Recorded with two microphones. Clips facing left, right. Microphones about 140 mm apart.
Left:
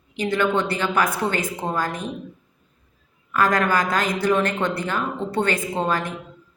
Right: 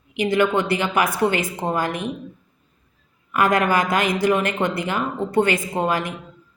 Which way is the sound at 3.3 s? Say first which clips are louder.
Right 2 dB; 15° right (ahead or behind).